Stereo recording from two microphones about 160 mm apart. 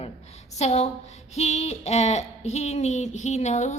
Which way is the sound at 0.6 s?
40° left (ahead or behind).